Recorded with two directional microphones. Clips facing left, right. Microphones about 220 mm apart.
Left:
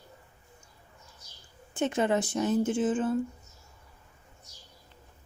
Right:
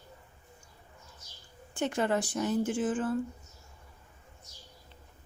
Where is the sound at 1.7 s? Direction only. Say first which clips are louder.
Left 3 dB; 20° left (ahead or behind).